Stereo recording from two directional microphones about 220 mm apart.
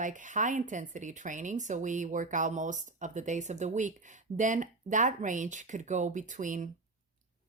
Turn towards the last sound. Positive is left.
turn(degrees=-35)  # may be behind; listen again after turning